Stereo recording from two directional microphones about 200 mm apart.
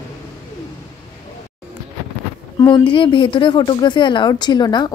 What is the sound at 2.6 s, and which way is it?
Speech, 25° left (ahead or behind).